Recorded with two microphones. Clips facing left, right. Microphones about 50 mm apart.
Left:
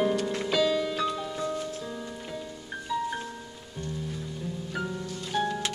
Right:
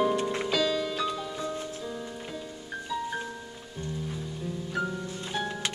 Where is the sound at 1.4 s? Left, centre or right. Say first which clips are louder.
Left 2 dB; right.